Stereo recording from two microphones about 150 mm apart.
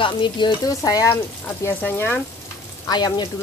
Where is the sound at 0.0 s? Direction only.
35° left (ahead or behind).